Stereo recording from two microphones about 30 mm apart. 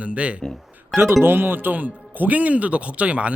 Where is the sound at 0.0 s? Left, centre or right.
Right.